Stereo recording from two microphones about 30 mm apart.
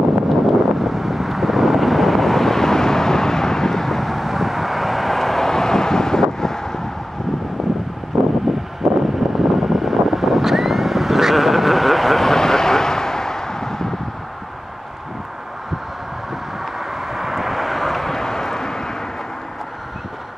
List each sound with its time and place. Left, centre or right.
0.3 s vehicle: centre
8.1 s a sound: centre
8.8 s vehicle: centre
17.0 s vehicle: centre